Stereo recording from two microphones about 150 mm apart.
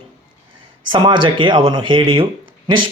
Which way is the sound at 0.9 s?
30° right (ahead or behind).